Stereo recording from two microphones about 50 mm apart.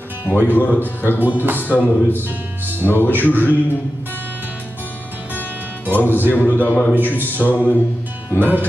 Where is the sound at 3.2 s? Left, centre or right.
Left.